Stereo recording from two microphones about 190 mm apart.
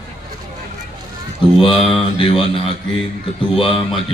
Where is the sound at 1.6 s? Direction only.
30° left (ahead or behind).